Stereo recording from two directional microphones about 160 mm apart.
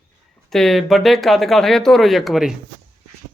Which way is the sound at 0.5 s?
Centre (ahead or behind).